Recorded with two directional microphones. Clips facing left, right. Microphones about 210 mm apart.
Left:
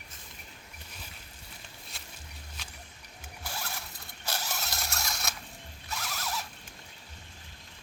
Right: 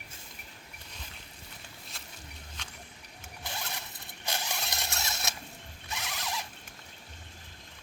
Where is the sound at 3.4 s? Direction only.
20° right (ahead or behind).